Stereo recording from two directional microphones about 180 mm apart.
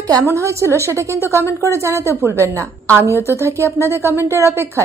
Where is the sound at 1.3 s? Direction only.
15° left (ahead or behind).